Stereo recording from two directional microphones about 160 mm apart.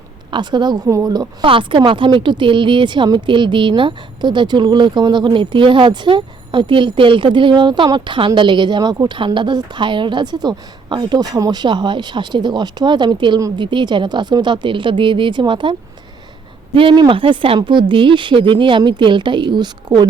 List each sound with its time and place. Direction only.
0.3 s speech: 30° right (ahead or behind)
16.7 s speech: 30° right (ahead or behind)